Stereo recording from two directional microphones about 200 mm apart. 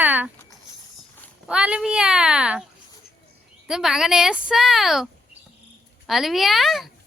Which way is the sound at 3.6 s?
5° right (ahead or behind).